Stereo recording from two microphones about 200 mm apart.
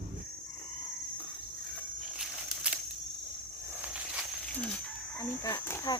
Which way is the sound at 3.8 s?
5° right (ahead or behind).